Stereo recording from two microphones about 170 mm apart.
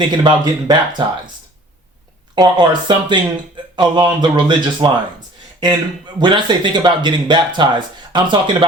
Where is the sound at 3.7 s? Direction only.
25° right (ahead or behind).